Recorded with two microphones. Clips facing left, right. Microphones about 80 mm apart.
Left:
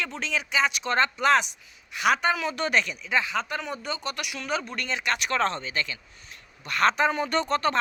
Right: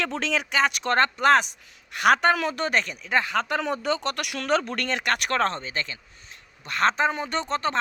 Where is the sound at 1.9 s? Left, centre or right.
Right.